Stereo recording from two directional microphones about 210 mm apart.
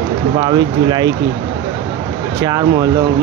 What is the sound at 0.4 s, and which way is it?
Speech, 20° right (ahead or behind).